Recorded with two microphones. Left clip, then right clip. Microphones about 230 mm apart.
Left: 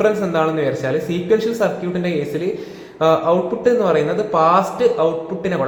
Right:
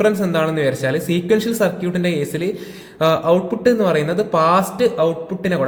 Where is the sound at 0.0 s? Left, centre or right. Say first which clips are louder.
Even; right.